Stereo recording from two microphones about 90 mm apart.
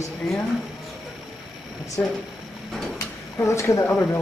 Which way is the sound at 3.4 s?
35° left (ahead or behind).